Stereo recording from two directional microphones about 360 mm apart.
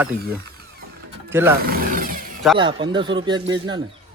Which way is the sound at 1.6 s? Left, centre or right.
Right.